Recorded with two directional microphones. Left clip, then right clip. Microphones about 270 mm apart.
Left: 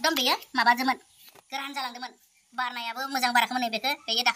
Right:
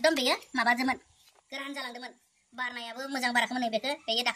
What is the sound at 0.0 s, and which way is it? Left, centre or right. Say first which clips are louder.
A woman's voice: left 1 dB; centre.